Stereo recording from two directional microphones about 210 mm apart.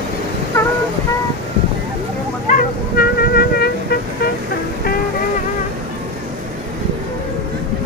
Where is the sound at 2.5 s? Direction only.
45° left (ahead or behind).